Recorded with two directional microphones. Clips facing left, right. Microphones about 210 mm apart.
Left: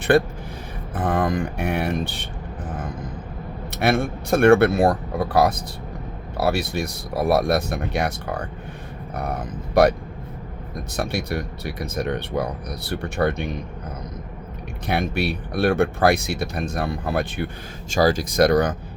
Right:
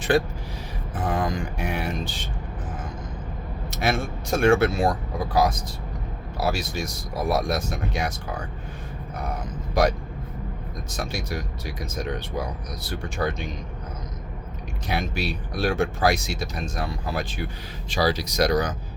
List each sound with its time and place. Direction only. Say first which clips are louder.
0.1 s speech: left 4 dB; 60° left (ahead or behind)
3.7 s speech: left 5 dB; 60° left (ahead or behind)
10.9 s speech: left 5 dB; 60° left (ahead or behind)
14.8 s speech: left 5 dB; 60° left (ahead or behind)
17.9 s speech: left 5 dB; 45° left (ahead or behind)